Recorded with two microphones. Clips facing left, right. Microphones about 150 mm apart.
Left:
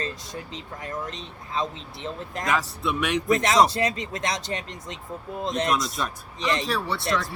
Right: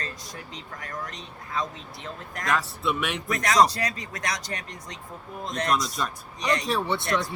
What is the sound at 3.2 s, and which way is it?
Speech, 25° left (ahead or behind).